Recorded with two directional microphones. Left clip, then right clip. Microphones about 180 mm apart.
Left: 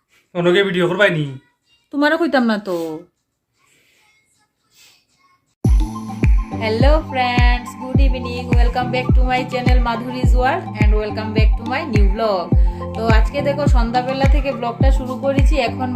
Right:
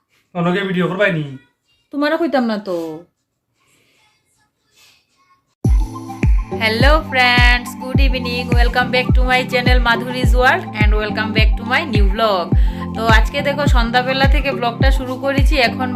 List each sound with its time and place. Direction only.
0.3 s a man's voice: 80° left
1.9 s a woman's voice: 10° left (ahead or behind)
6.6 s speech: 5° left (ahead or behind)